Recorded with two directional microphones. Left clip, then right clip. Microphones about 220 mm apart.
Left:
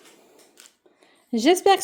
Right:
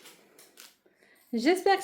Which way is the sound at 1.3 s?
40° left (ahead or behind).